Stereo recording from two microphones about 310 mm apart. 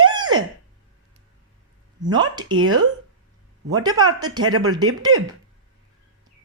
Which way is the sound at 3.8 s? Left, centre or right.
Centre.